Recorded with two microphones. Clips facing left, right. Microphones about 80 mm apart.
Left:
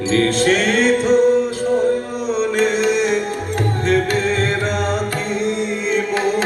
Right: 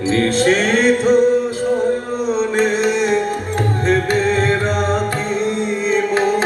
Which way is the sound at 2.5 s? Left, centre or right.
Right.